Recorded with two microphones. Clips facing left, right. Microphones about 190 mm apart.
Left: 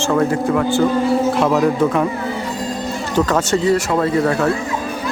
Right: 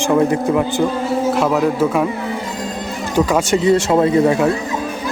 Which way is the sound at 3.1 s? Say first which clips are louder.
Right 1 dB; 15° right (ahead or behind).